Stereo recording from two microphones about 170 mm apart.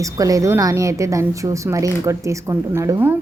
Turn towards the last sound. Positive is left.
turn(degrees=-15)  # may be behind; listen again after turning